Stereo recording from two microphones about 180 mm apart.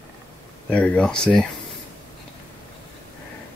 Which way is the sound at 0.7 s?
5° left (ahead or behind).